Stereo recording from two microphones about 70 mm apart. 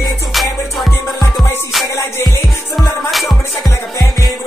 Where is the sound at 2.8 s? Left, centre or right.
Centre.